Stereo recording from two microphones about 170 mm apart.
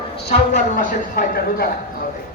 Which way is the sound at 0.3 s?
45° left (ahead or behind).